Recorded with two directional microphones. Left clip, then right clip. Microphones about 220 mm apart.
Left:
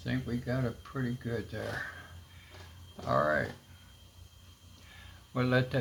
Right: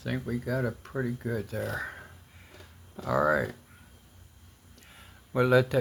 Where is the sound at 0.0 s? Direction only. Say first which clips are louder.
Right 3 dB; 60° right (ahead or behind).